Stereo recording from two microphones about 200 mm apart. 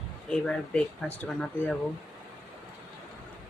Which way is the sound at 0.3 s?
5° left (ahead or behind).